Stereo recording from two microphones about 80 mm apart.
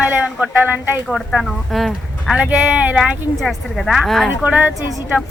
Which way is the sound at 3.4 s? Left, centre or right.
Centre.